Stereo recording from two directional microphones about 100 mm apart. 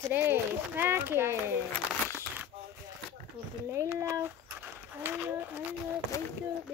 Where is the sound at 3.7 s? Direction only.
30° right (ahead or behind).